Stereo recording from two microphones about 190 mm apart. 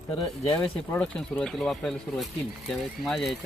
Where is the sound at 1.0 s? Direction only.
5° left (ahead or behind).